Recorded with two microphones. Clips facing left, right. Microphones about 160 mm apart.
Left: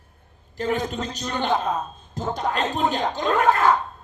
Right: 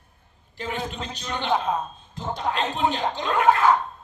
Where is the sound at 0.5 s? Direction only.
45° left (ahead or behind).